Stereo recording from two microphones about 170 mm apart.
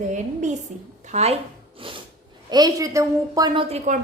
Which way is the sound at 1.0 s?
40° right (ahead or behind).